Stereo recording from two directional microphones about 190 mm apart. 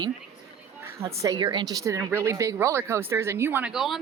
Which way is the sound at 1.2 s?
20° right (ahead or behind).